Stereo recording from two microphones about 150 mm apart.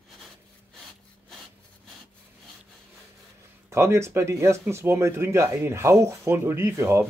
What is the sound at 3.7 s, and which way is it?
Speech, 20° right (ahead or behind).